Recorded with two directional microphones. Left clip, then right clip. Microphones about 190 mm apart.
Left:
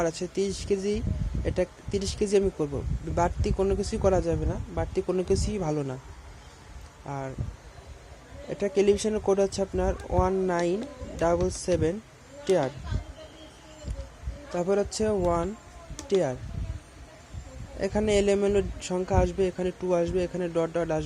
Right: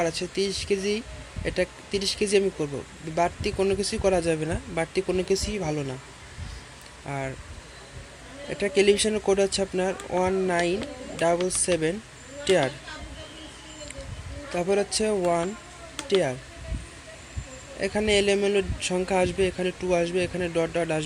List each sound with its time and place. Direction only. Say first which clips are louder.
0.0 s speech: right 2 dB; 15° left (ahead or behind)
4.3 s speech: right 3 dB; 5° right (ahead or behind)
4.9 s speech: even; 10° left (ahead or behind)
7.1 s speech: right 3 dB; centre (ahead or behind)
8.4 s speech: right 2 dB; 10° left (ahead or behind)
14.5 s speech: right 2 dB; 10° left (ahead or behind)
17.7 s speech: right 2 dB; 15° left (ahead or behind)